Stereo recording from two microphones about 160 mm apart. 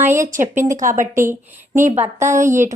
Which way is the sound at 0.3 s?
50° right (ahead or behind).